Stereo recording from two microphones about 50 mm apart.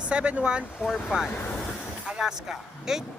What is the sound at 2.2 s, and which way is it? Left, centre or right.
Speech, centre.